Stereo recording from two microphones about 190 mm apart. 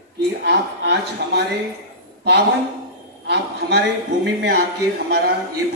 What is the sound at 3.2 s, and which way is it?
Speech, 60° right (ahead or behind).